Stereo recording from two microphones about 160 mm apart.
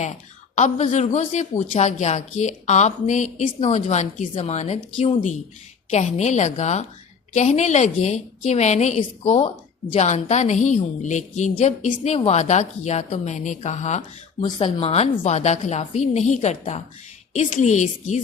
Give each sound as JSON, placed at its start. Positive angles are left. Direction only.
{"t": 0.5, "sound": "a woman's voice", "side_deg": 45}
{"t": 9.9, "sound": "a woman's voice", "side_deg": 45}